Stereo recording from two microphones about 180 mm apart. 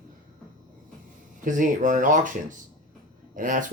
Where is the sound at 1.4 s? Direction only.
45° right (ahead or behind).